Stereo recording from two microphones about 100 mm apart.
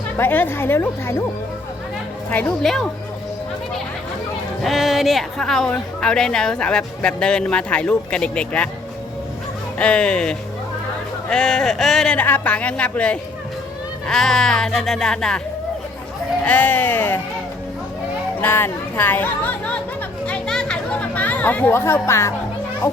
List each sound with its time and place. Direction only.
0.2 s a woman's voice: 20° left (ahead or behind)
2.3 s a woman's voice: 15° left (ahead or behind)
4.6 s a woman's voice: centre (ahead or behind)
9.7 s a woman's voice: 10° left (ahead or behind)
12.1 s a woman's voice: 15° left (ahead or behind)
16.5 s a woman's voice: 15° left (ahead or behind)
18.3 s speech: 20° left (ahead or behind)
20.2 s chatter: 10° left (ahead or behind); by 22.3 s 25° left (ahead or behind)